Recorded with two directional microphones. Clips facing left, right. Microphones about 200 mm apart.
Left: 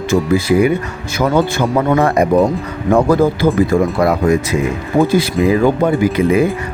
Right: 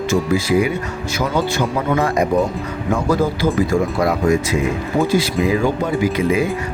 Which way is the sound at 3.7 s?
60° left (ahead or behind).